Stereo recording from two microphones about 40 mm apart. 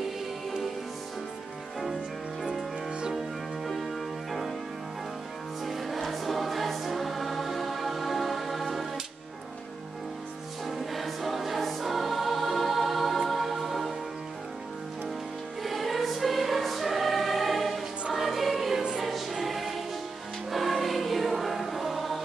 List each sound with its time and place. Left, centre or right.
4.3 s music: centre
5.7 s music: centre
10.7 s choir: centre
15.6 s choir: centre
18.1 s music: centre
20.5 s choir: centre